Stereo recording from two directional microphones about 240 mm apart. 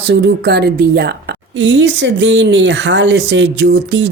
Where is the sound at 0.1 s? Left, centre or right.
Right.